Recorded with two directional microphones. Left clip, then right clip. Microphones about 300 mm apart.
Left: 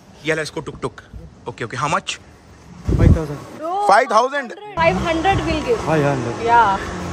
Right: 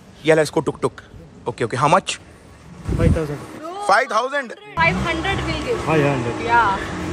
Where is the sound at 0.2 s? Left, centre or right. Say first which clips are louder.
Right 6 dB; centre.